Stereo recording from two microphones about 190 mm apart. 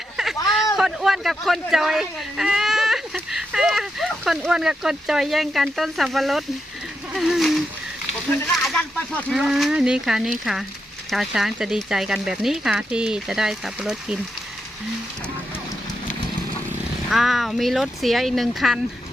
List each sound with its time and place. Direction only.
0.8 s speech: centre (ahead or behind)
7.1 s a sound: centre (ahead or behind)
8.4 s speech: 5° left (ahead or behind)
17.1 s speech: centre (ahead or behind)